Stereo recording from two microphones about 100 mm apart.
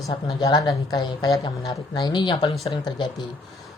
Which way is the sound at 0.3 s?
45° left (ahead or behind).